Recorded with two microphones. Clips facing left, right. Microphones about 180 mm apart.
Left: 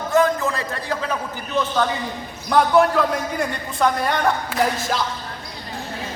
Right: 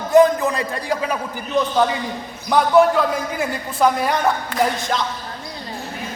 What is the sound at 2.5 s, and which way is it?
A man's voice, centre (ahead or behind).